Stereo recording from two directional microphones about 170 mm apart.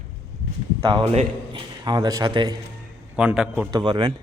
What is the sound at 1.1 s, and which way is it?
Speech, 25° right (ahead or behind).